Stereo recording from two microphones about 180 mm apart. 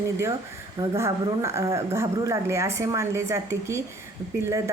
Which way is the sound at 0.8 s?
15° right (ahead or behind).